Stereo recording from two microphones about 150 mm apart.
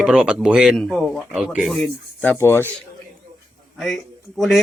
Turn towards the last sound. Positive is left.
turn(degrees=0)  # may be behind; listen again after turning